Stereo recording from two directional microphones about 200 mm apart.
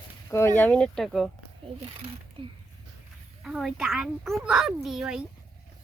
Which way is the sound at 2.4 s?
25° right (ahead or behind).